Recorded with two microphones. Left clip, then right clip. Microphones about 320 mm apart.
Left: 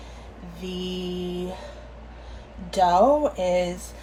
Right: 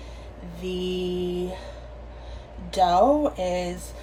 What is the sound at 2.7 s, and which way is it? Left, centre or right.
A woman's voice, centre.